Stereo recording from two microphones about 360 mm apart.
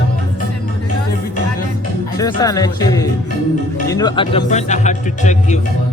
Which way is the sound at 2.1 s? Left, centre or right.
Centre.